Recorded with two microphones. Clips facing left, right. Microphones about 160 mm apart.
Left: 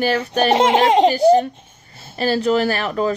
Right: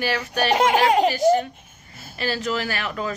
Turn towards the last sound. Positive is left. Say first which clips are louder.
# left 8 dB
turn(degrees=35)  # may be behind; listen again after turning